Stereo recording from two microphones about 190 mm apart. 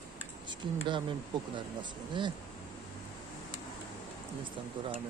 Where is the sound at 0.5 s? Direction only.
25° right (ahead or behind).